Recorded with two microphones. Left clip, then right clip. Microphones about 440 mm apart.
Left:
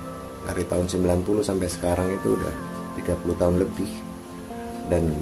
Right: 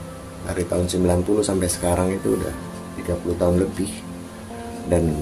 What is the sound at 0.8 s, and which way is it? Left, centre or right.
Speech, left.